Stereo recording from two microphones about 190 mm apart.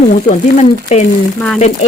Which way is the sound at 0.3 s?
35° left (ahead or behind).